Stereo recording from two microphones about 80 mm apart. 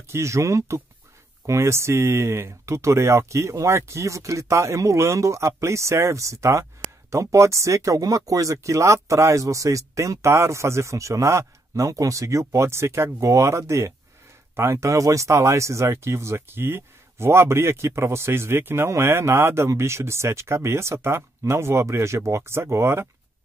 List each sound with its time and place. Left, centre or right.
0.1 s speech: right